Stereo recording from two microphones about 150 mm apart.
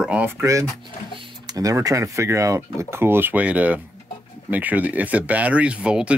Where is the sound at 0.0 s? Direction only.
10° right (ahead or behind).